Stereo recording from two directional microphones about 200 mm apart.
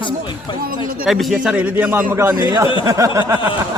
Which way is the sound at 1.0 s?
Centre (ahead or behind).